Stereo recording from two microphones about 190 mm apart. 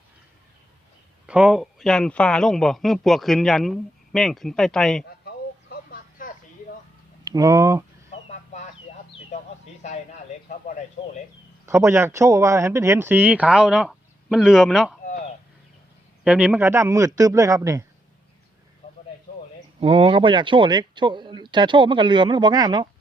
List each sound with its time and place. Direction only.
1.3 s speech: 5° right (ahead or behind)
5.0 s a sound: 60° left (ahead or behind)
7.3 s speech: 20° right (ahead or behind)
10.6 s speech: 40° left (ahead or behind)
11.6 s speech: 15° right (ahead or behind)
16.2 s speech: 5° right (ahead or behind)
18.8 s a sound: 35° left (ahead or behind)
19.8 s speech: 30° right (ahead or behind)